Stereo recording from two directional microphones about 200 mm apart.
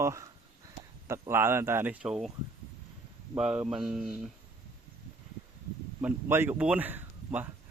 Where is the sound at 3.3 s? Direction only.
5° right (ahead or behind).